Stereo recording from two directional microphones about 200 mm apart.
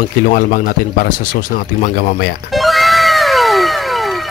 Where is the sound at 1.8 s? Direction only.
40° left (ahead or behind).